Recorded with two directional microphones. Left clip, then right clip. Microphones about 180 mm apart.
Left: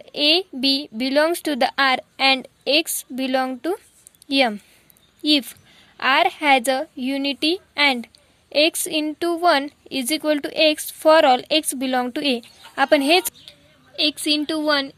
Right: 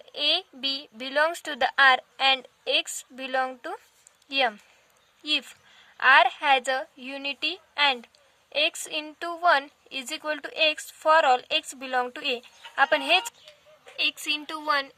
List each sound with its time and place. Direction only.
0.0 s speech: 15° left (ahead or behind)
13.9 s speech: 30° left (ahead or behind)